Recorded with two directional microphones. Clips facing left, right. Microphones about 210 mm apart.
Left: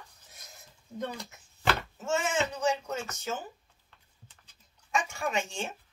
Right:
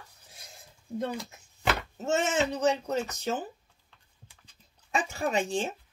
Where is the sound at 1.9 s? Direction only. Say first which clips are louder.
Right 6 dB; 35° right (ahead or behind).